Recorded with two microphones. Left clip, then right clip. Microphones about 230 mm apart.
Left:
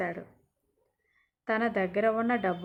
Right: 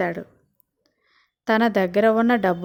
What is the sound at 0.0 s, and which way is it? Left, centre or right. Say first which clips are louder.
Speech: right 9 dB; right.